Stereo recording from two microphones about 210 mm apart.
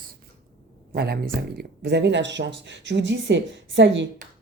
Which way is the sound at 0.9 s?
45° right (ahead or behind).